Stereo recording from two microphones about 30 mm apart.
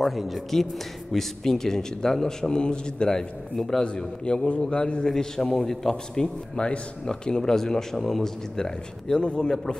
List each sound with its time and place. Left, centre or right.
0.0 s speech: centre
1.1 s a man's voice: centre
2.5 s a man's voice: left
3.2 s a man's voice: centre
3.8 s a man's voice: left
5.0 s a man's voice: left
6.6 s a man's voice: left; by 8.3 s centre
8.5 s a man's voice: left
9.2 s a man's voice: left